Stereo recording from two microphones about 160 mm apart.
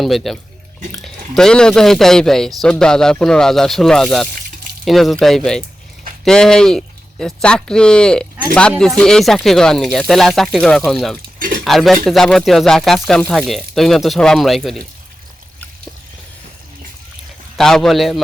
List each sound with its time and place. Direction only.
0.0 s speech: centre (ahead or behind)
11.3 s cutlery: 60° right (ahead or behind)
11.6 s speech: centre (ahead or behind)
17.6 s speech: centre (ahead or behind)